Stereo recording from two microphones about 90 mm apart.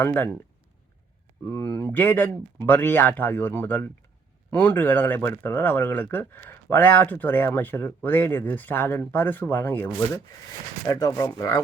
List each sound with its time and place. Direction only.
0.0 s speech: 25° left (ahead or behind)
1.5 s speech: 25° left (ahead or behind)
10.8 s speech: 40° left (ahead or behind)